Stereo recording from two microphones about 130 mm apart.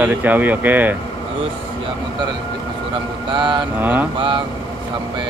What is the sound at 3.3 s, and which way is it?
Speech, 40° right (ahead or behind).